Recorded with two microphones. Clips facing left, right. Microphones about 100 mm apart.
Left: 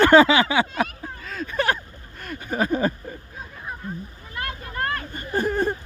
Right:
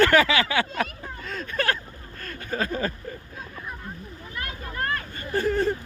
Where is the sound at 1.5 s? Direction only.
20° left (ahead or behind).